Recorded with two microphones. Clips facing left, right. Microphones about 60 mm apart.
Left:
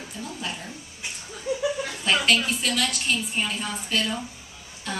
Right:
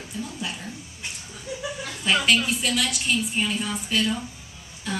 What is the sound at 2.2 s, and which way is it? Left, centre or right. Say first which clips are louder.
A woman's voice: right 1 dB; centre.